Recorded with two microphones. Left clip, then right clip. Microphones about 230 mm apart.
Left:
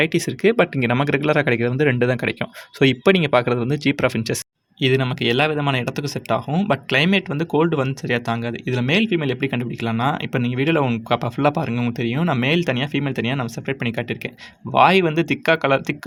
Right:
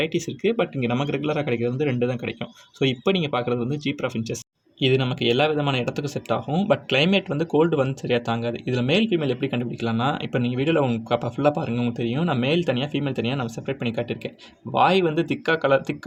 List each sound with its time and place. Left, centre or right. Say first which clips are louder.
0.0 s speech: left 6 dB; left
4.8 s speech: left 2 dB; left